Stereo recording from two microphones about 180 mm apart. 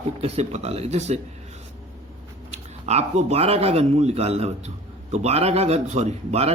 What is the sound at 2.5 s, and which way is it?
A man's voice, 40° right (ahead or behind).